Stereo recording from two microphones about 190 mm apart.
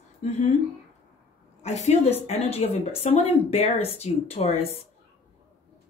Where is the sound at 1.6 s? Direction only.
35° left (ahead or behind).